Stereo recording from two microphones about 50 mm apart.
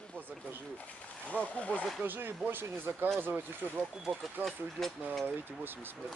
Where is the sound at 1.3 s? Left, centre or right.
Right.